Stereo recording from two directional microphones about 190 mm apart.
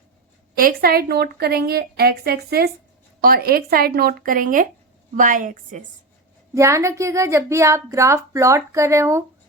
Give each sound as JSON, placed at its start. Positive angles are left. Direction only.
{"t": 0.5, "sound": "a woman's voice", "side_deg": -50}
{"t": 6.5, "sound": "speech", "side_deg": -15}